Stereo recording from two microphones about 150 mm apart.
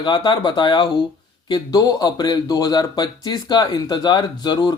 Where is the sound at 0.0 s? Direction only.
30° left (ahead or behind).